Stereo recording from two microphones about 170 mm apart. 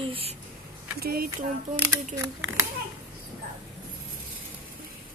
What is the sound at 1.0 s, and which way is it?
Speech, 65° right (ahead or behind).